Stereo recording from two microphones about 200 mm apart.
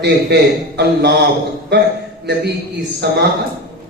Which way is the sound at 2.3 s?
55° right (ahead or behind).